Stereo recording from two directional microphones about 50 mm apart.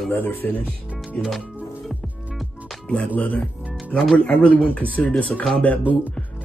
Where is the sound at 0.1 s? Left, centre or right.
Left.